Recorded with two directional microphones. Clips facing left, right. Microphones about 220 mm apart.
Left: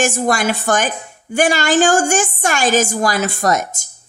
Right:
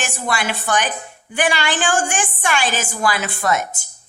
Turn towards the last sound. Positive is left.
turn(degrees=40)  # may be behind; listen again after turning